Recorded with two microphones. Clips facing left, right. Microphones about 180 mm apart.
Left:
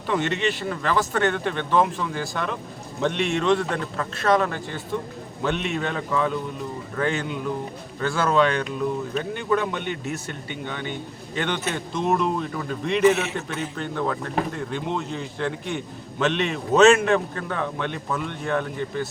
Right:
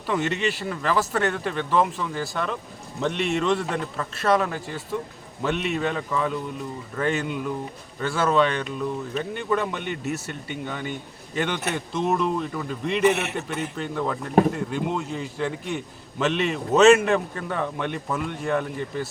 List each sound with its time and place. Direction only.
0.1 s a man's voice: 5° right (ahead or behind)
13.0 s a man's voice: 60° right (ahead or behind)
13.7 s a man's voice: 5° right (ahead or behind)